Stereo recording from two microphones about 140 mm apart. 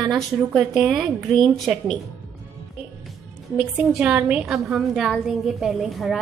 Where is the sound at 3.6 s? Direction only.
10° right (ahead or behind).